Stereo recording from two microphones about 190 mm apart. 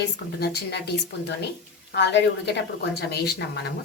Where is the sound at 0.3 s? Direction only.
55° left (ahead or behind).